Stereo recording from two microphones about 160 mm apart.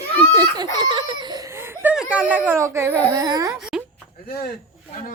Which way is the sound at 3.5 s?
5° right (ahead or behind).